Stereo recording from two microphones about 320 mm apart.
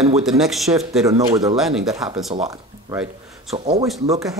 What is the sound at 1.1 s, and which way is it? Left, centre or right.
Speech, centre.